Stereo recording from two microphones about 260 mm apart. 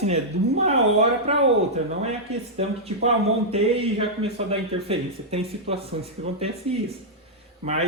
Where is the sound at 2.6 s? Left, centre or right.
Right.